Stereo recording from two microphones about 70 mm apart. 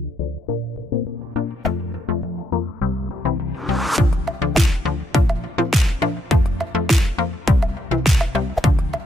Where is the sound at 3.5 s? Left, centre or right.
Centre.